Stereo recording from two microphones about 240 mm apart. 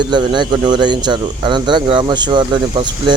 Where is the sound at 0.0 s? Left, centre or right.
Centre.